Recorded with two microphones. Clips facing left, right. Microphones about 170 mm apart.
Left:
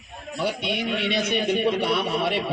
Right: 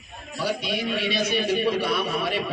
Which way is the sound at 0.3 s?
25° left (ahead or behind).